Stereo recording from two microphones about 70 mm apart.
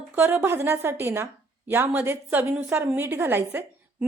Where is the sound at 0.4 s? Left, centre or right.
Right.